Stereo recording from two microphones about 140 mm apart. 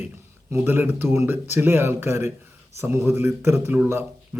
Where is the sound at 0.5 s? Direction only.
15° right (ahead or behind).